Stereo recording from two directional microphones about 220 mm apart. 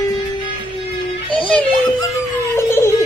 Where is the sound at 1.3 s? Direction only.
25° left (ahead or behind).